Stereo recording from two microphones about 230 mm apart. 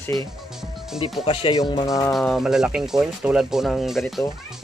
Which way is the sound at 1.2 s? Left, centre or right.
Left.